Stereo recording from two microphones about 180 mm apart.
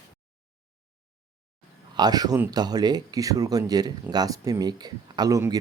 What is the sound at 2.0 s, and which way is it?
Speech, 20° right (ahead or behind).